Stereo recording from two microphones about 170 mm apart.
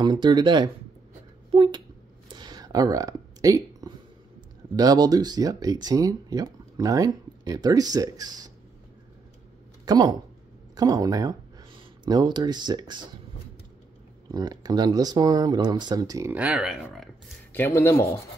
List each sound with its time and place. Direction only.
0.0 s speech: 25° right (ahead or behind)
2.2 s a sound: 25° right (ahead or behind)
4.7 s speech: 25° right (ahead or behind)
9.8 s speech: 25° right (ahead or behind)
14.3 s speech: 25° right (ahead or behind); by 17.1 s centre (ahead or behind)
17.5 s speech: 15° left (ahead or behind)